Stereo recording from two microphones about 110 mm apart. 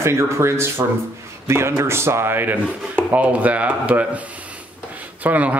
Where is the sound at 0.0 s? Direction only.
25° right (ahead or behind).